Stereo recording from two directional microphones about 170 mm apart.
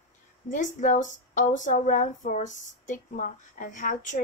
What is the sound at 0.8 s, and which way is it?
A woman's voice, 50° left (ahead or behind).